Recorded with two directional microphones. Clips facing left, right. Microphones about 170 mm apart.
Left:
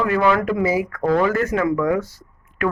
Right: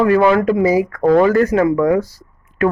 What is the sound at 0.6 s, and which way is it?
Speech, 40° right (ahead or behind).